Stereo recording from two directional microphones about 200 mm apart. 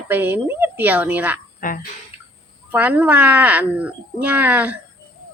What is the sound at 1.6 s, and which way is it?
Speech, 45° left (ahead or behind).